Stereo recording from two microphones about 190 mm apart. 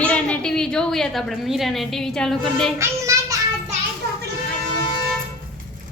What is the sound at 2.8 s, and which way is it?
Child singing, 15° right (ahead or behind).